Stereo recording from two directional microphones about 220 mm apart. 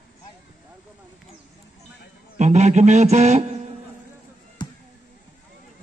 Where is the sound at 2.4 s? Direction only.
30° right (ahead or behind).